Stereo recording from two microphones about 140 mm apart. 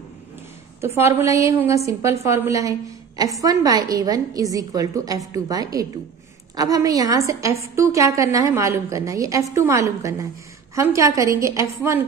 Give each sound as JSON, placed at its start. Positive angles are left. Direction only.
{"t": 0.7, "sound": "a woman's voice", "side_deg": -20}